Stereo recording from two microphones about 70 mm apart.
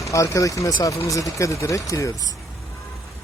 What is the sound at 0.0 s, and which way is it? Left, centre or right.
Speech, left.